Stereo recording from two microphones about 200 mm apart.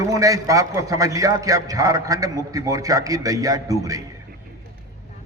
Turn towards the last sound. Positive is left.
turn(degrees=-15)  # may be behind; listen again after turning